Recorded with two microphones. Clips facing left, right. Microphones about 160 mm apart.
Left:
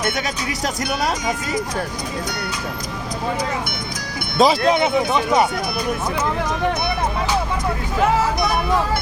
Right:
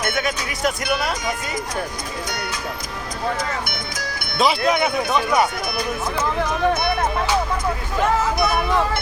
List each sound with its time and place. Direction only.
0.2 s speech: 35° left (ahead or behind)
4.4 s speech: 40° left (ahead or behind)
4.7 s speech: 25° left (ahead or behind)